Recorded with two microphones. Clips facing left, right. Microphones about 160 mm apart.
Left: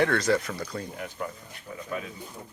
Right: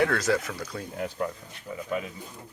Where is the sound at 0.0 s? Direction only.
5° right (ahead or behind).